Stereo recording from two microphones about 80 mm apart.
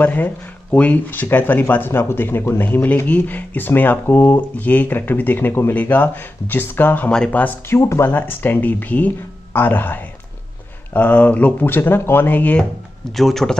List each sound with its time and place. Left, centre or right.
0.0 s speech: left
7.1 s speech: centre
7.4 s speech: left
13.1 s a man's voice: centre